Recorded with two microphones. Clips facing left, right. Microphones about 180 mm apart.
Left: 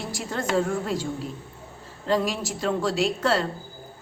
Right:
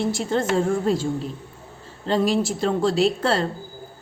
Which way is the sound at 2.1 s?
30° right (ahead or behind).